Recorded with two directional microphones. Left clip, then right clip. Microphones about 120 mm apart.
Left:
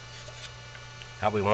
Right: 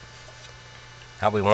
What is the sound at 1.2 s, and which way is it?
Speech, 40° right (ahead or behind).